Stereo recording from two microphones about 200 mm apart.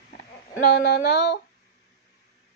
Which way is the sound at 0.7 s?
55° left (ahead or behind).